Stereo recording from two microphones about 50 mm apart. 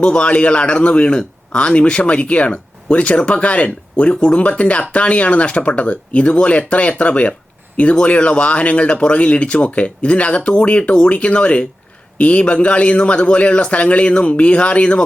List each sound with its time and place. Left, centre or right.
0.0 s a man's voice: left